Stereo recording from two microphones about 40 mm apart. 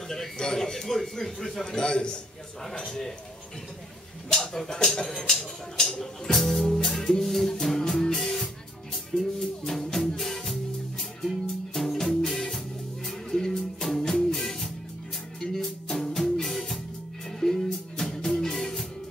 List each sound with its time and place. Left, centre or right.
0.1 s a man's voice: centre
1.8 s a man's voice: left
4.3 s a man's voice: centre
6.3 s music: centre